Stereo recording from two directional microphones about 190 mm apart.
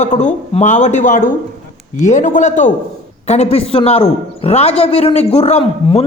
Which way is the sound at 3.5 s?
30° left (ahead or behind).